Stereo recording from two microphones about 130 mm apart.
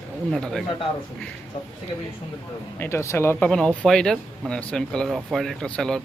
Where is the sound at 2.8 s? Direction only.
20° left (ahead or behind).